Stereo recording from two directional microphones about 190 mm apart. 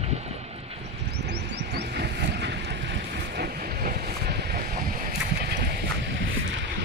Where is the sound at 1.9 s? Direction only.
60° right (ahead or behind).